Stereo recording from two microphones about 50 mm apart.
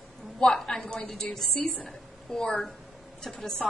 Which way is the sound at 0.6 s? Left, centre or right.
Centre.